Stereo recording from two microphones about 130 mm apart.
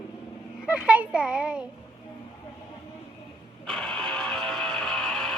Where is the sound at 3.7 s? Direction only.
5° left (ahead or behind).